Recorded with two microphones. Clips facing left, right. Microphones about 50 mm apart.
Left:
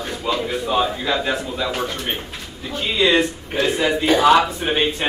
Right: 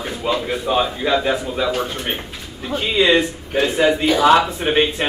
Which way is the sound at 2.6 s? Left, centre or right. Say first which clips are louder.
Right 2 dB; right.